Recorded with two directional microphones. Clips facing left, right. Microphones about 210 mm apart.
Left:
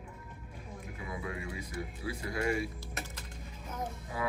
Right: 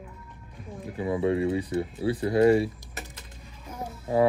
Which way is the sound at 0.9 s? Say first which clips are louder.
Right 16 dB; 30° right (ahead or behind).